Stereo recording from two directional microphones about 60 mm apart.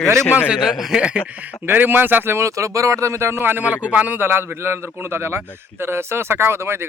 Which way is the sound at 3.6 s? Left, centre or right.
Right.